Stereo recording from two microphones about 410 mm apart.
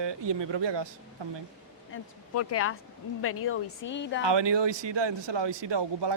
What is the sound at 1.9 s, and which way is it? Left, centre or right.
A woman's voice, left.